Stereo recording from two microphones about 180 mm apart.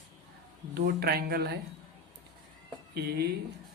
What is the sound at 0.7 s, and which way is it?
Speech, 60° right (ahead or behind).